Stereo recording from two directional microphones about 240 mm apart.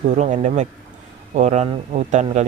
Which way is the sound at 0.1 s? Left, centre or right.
Right.